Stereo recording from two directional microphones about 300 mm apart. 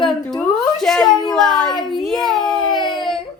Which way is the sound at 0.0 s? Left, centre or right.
Centre.